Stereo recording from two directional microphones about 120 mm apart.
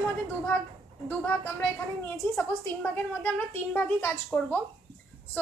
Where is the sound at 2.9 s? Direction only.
15° left (ahead or behind).